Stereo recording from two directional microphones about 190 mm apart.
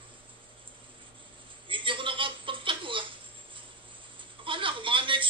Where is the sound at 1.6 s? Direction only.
25° right (ahead or behind).